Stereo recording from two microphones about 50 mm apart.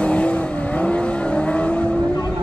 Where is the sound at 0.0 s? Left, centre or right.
Left.